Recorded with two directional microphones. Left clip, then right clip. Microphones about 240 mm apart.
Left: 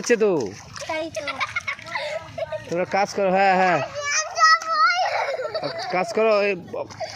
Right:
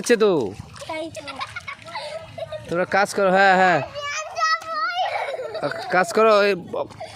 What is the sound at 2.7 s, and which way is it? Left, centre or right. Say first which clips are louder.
Speech: right 3 dB; centre.